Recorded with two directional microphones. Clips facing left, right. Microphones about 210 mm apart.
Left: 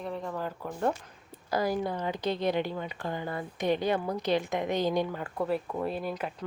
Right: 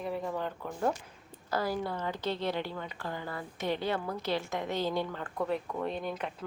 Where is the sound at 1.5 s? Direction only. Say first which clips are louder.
Left 3 dB; 15° left (ahead or behind).